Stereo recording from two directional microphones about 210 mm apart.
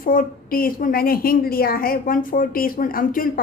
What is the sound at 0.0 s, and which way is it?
A woman's voice, 40° left (ahead or behind).